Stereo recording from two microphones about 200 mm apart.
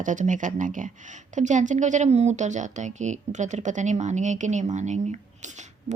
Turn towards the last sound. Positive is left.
turn(degrees=-35)  # may be behind; listen again after turning